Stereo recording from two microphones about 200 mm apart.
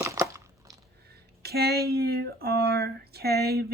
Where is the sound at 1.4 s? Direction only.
50° right (ahead or behind).